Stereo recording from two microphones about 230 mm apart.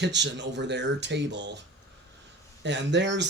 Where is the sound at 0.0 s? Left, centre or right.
Right.